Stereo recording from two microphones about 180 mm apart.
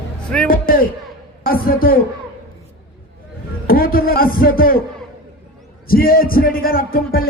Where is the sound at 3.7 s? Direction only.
55° left (ahead or behind).